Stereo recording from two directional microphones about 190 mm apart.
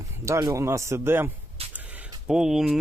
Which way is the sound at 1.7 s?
10° right (ahead or behind).